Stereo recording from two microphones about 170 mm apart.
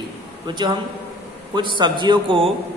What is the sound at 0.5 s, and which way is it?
A man's voice, 25° right (ahead or behind).